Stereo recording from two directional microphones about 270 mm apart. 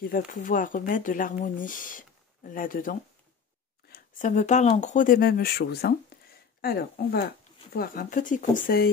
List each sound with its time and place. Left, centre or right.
0.0 s speech: left